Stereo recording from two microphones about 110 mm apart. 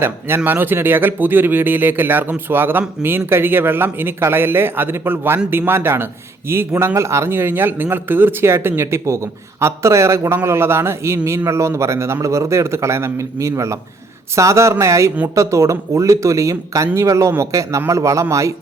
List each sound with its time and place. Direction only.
0.0 s a man's voice: 20° right (ahead or behind)